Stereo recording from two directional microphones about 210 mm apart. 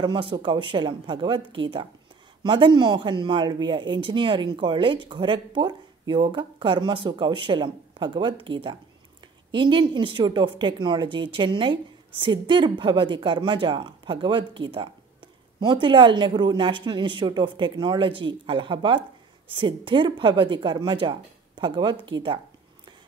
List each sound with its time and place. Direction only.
0.0 s speech: 20° right (ahead or behind)